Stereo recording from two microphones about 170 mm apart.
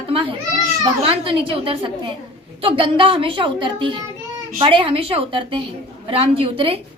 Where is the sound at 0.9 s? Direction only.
30° right (ahead or behind).